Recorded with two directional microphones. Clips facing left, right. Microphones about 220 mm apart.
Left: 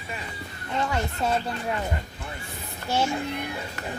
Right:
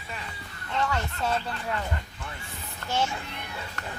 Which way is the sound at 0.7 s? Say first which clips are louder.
Left 2 dB; 15° left (ahead or behind).